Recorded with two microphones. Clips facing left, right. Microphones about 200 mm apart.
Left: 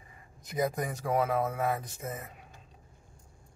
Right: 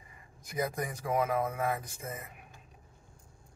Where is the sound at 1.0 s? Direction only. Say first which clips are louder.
Left 2 dB; 30° left (ahead or behind).